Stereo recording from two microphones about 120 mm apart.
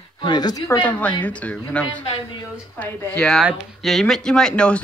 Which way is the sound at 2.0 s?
50° left (ahead or behind).